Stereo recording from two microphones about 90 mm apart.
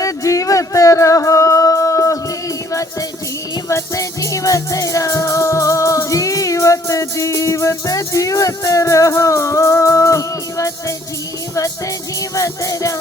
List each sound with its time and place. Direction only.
0.0 s music: 40° left (ahead or behind)
3.7 s music: 35° left (ahead or behind)
12.3 s music: 40° left (ahead or behind)